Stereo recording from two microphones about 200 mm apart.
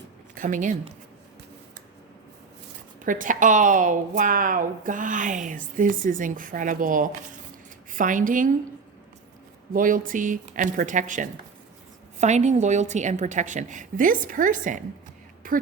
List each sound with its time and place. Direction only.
0.3 s speech: 40° right (ahead or behind)
3.0 s a woman's voice: 40° right (ahead or behind)
9.7 s a woman's voice: 45° right (ahead or behind)